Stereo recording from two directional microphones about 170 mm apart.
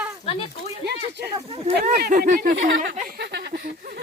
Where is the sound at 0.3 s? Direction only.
35° left (ahead or behind).